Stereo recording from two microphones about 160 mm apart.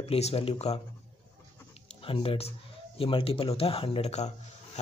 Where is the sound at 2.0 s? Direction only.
35° left (ahead or behind).